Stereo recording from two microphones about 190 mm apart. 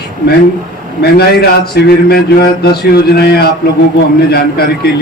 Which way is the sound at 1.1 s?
55° left (ahead or behind).